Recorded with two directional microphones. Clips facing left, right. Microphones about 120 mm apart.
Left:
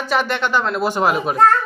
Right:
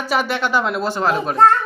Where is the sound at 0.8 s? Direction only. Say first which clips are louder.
Left 1 dB; 15° left (ahead or behind).